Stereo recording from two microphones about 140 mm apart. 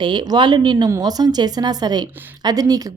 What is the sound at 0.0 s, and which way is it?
A woman's voice, 35° right (ahead or behind).